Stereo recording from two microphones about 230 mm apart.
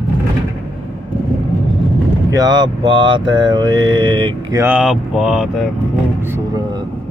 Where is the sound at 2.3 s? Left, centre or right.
Centre.